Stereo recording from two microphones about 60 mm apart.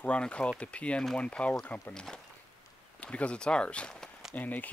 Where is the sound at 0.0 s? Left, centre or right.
Centre.